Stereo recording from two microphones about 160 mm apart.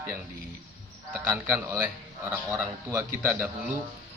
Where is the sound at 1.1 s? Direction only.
10° right (ahead or behind).